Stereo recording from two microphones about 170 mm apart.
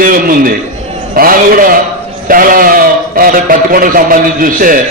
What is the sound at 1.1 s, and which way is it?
A man's voice, 55° right (ahead or behind).